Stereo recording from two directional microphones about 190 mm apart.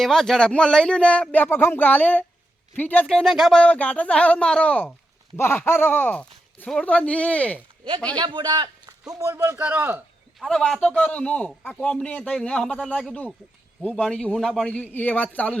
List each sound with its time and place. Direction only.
0.0 s a man's voice: centre (ahead or behind)
8.1 s a man's voice: 25° right (ahead or behind)
10.4 s a man's voice: centre (ahead or behind)